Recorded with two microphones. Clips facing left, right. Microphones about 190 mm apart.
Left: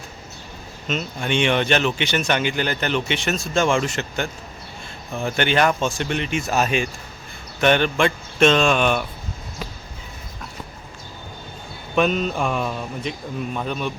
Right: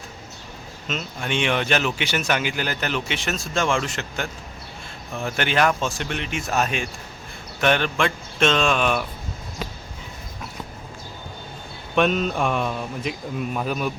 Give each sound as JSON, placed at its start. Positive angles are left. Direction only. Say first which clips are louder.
{"t": 0.9, "sound": "speech", "louder": "left 4 dB", "side_deg": 0}
{"t": 11.9, "sound": "speech", "louder": "even", "side_deg": 0}